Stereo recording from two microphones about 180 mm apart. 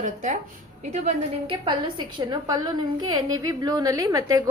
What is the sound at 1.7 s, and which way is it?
A woman's voice, 25° right (ahead or behind).